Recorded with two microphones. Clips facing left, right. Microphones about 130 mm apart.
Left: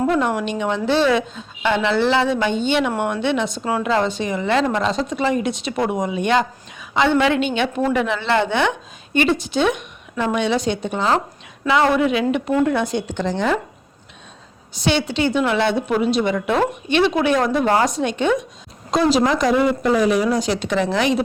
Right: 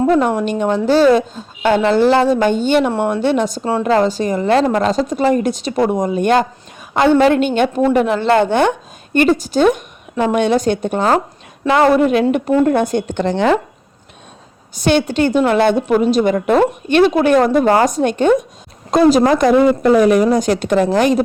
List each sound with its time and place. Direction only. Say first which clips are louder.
0.1 s a woman's voice: right 5 dB; 40° right (ahead or behind)
3.6 s a woman's voice: right 4 dB; 30° right (ahead or behind)
3.8 s a woman's voice: right 7 dB; 40° right (ahead or behind); by 13.6 s 65° right (ahead or behind)
14.8 s a woman's voice: right 5 dB; 50° right (ahead or behind)